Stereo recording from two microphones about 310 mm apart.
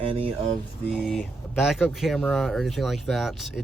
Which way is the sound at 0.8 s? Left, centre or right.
Centre.